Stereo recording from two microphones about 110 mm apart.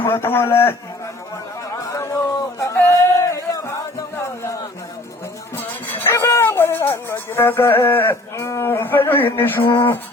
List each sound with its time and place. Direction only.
0.0 s a man's voice: 20° left (ahead or behind)
1.8 s a sound: 30° left (ahead or behind)
5.9 s dog: 20° left (ahead or behind)